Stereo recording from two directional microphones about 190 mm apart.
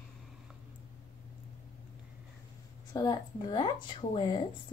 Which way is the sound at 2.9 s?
20° left (ahead or behind).